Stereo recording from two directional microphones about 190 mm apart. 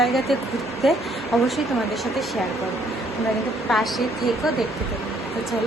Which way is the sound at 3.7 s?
Centre (ahead or behind).